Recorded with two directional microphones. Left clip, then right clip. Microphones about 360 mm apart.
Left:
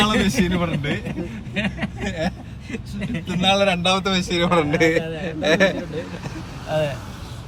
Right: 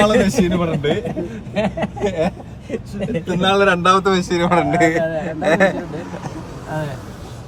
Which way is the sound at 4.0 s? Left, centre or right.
Centre.